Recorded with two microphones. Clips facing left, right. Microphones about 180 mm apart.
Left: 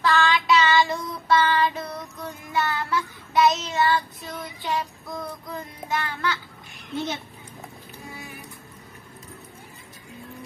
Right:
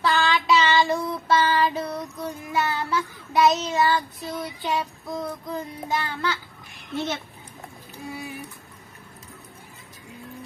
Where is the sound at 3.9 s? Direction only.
30° right (ahead or behind).